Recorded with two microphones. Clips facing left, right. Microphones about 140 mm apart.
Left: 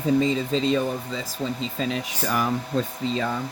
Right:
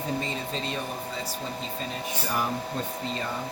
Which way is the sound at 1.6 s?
90° left.